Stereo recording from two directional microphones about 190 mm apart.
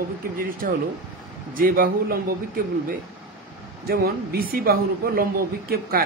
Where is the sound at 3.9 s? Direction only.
50° right (ahead or behind).